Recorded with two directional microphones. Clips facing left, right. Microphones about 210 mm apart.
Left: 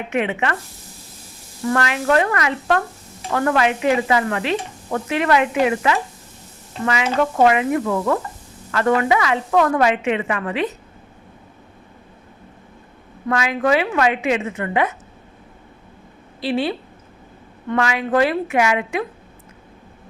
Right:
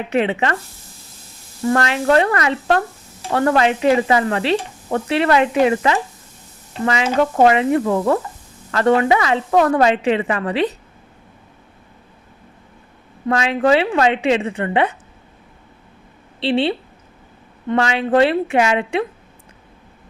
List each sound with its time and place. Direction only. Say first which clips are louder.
0.1 s sizzle: right 3 dB; 35° right (ahead or behind)
1.6 s sizzle: right 3 dB; 30° right (ahead or behind)
13.2 s a woman's voice: right 3 dB; 30° right (ahead or behind)
16.4 s a woman's voice: right 3 dB; 30° right (ahead or behind)
17.7 s a woman's voice: right 3 dB; 30° right (ahead or behind)